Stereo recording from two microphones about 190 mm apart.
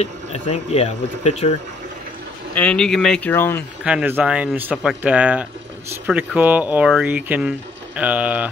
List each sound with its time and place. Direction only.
0.0 s speech: 35° left (ahead or behind)
2.5 s speech: 5° left (ahead or behind)
3.8 s speech: 10° right (ahead or behind)